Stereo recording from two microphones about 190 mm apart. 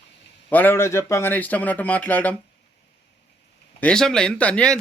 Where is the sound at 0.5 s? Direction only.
10° left (ahead or behind).